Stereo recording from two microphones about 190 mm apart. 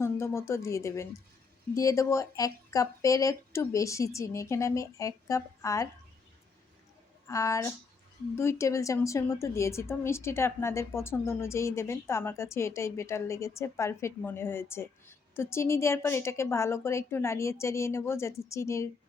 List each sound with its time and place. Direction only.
0.0 s a woman's voice: 15° left (ahead or behind)
7.3 s a woman's voice: 15° left (ahead or behind)